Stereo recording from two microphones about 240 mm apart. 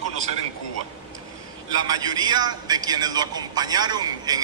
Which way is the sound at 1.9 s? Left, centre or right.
Centre.